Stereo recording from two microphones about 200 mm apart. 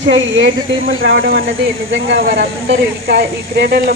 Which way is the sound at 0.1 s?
70° right (ahead or behind).